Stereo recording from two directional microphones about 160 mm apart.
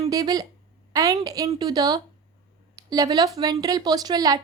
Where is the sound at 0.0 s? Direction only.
25° right (ahead or behind).